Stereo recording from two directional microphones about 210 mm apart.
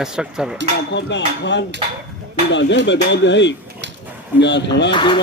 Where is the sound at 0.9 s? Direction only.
55° left (ahead or behind).